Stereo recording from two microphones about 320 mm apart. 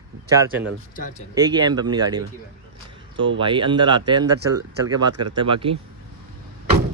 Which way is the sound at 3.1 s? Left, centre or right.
Right.